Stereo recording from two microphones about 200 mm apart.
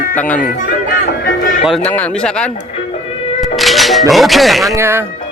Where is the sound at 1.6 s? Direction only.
Centre (ahead or behind).